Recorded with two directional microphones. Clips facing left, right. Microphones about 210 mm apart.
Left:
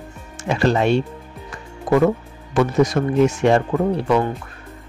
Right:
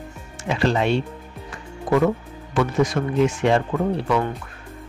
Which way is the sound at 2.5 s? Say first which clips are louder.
Left 3 dB; 40° left (ahead or behind).